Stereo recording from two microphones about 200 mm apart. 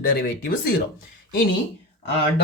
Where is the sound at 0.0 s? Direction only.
50° left (ahead or behind).